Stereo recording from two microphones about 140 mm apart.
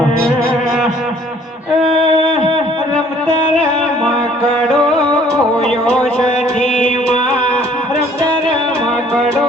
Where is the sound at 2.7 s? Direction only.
5° left (ahead or behind).